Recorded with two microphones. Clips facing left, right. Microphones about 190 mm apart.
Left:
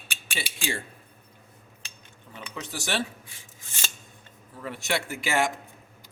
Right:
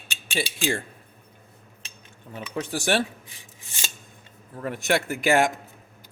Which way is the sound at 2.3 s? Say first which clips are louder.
Right 7 dB; 50° right (ahead or behind).